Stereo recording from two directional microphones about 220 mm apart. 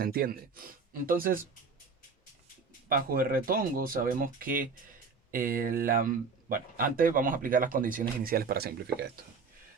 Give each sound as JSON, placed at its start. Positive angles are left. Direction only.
{"t": 0.0, "sound": "speech", "side_deg": -45}
{"t": 2.9, "sound": "speech", "side_deg": -40}